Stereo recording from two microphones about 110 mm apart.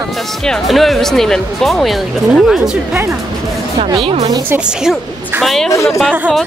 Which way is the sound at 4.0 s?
65° right (ahead or behind).